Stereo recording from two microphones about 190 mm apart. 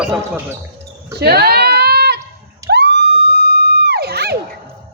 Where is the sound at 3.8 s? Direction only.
60° right (ahead or behind).